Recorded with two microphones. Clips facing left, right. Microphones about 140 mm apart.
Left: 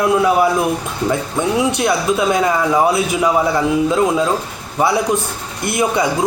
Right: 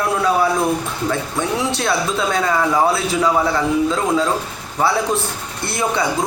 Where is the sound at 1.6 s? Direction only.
15° left (ahead or behind).